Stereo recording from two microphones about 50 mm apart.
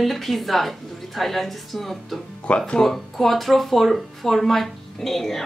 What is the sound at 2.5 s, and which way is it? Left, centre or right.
Speech, left.